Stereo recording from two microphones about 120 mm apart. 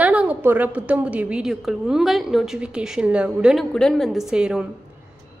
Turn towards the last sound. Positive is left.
turn(degrees=-5)  # may be behind; listen again after turning